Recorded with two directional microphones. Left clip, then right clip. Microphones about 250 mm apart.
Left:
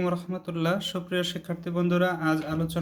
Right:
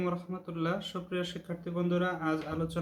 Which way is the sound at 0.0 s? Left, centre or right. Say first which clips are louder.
Left 6 dB; left.